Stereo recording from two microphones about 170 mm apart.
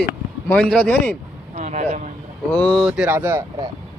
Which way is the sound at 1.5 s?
45° right (ahead or behind).